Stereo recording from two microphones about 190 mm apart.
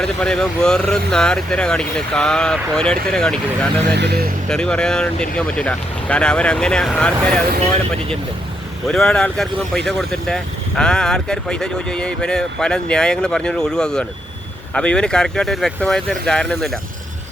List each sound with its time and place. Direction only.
0.0 s speech: 5° left (ahead or behind)
3.9 s speech: 60° right (ahead or behind)
4.4 s speech: 5° left (ahead or behind)
8.9 s speech: 5° left (ahead or behind)